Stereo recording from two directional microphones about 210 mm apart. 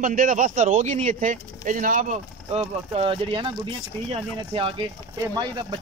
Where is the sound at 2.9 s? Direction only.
25° right (ahead or behind).